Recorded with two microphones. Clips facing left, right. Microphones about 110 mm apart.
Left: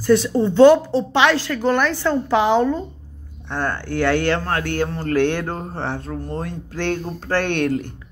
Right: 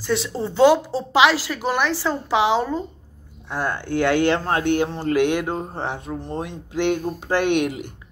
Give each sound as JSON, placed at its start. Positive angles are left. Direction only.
{"t": 0.0, "sound": "a woman's voice", "side_deg": 0}